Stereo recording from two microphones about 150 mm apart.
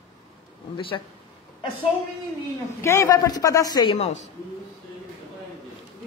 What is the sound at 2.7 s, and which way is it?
Speech, 20° left (ahead or behind).